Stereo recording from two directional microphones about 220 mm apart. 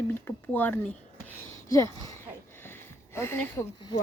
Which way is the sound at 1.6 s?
15° left (ahead or behind).